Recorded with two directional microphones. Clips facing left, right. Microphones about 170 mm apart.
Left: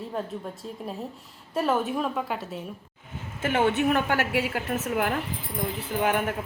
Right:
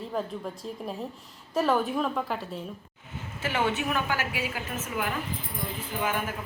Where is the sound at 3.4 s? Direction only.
55° left (ahead or behind).